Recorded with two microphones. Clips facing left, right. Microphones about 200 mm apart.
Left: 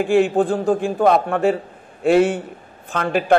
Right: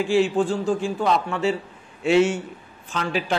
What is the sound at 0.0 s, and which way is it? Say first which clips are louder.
A man's voice: left 4 dB; 55° left (ahead or behind).